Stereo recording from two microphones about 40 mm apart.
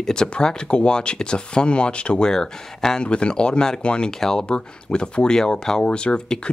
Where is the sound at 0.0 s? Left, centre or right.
Centre.